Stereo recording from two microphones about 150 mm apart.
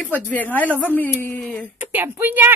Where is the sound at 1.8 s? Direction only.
15° right (ahead or behind).